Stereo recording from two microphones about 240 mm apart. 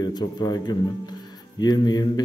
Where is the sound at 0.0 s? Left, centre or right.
Centre.